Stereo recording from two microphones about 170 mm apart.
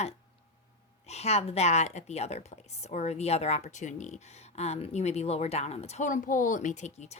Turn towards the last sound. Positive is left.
turn(degrees=40)  # may be behind; listen again after turning